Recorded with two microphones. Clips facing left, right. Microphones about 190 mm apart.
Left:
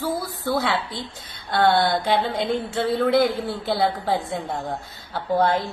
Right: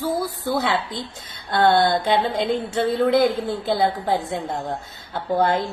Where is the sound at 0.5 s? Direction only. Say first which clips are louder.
Right 1 dB; 20° right (ahead or behind).